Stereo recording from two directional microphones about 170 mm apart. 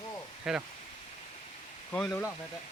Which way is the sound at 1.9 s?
10° left (ahead or behind).